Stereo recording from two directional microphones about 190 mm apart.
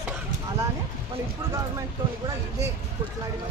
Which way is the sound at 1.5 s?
15° right (ahead or behind).